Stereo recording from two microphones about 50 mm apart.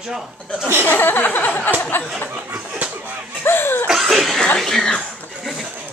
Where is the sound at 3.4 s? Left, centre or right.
Left.